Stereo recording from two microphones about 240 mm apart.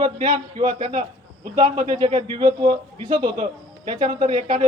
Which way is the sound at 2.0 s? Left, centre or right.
Centre.